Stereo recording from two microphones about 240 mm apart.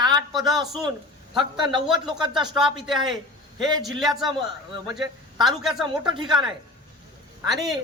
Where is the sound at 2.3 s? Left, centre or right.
Centre.